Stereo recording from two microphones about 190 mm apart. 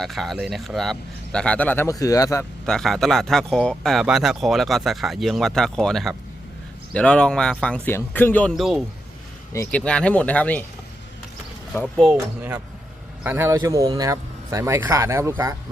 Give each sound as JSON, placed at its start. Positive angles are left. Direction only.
{"t": 0.0, "sound": "speech", "side_deg": 0}
{"t": 2.6, "sound": "speech", "side_deg": 0}
{"t": 9.5, "sound": "speech", "side_deg": 10}
{"t": 11.7, "sound": "speech", "side_deg": 0}
{"t": 12.4, "sound": "speech", "side_deg": -10}